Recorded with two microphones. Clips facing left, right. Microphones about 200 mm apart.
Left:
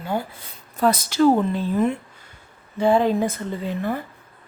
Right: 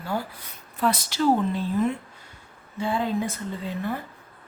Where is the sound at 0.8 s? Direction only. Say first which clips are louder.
Left 5 dB; 45° left (ahead or behind).